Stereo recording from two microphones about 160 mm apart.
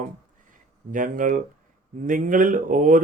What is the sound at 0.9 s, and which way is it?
Speech, 55° right (ahead or behind).